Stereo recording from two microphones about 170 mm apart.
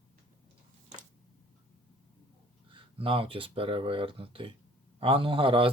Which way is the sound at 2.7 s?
30° right (ahead or behind).